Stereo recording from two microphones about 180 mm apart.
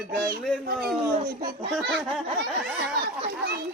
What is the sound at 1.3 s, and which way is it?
Speech, 50° right (ahead or behind).